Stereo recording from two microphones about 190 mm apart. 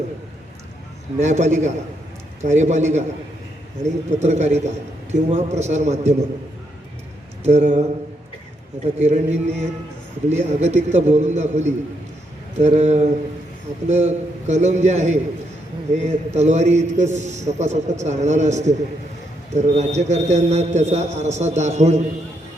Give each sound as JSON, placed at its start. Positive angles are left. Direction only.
{"t": 1.2, "sound": "a man's voice", "side_deg": -40}
{"t": 4.2, "sound": "a man's voice", "side_deg": -35}
{"t": 7.4, "sound": "a man's voice", "side_deg": -40}
{"t": 9.0, "sound": "a man's voice", "side_deg": -35}